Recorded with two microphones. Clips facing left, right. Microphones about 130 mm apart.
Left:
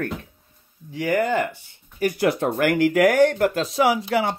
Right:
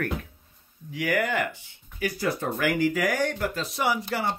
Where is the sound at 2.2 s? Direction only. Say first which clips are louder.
Left 7 dB; 75° left (ahead or behind); by 4.3 s 90° left.